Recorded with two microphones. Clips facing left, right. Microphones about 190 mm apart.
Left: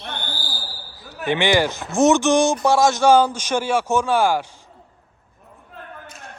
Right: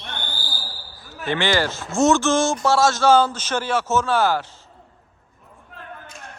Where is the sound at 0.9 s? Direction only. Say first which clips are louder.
Left 3 dB; 20° left (ahead or behind).